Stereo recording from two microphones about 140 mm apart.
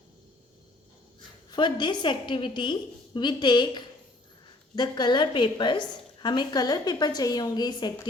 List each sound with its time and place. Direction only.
1.5 s a woman's voice: 35° left (ahead or behind)